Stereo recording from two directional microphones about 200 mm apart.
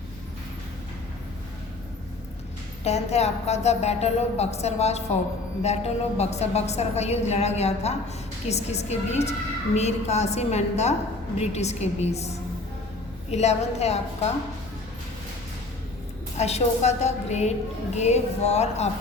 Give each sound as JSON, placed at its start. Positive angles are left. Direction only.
{"t": 2.8, "sound": "a woman's voice", "side_deg": 30}
{"t": 13.3, "sound": "a woman's voice", "side_deg": 35}
{"t": 16.4, "sound": "a woman's voice", "side_deg": 35}